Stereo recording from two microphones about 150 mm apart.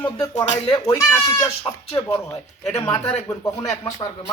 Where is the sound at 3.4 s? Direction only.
25° left (ahead or behind).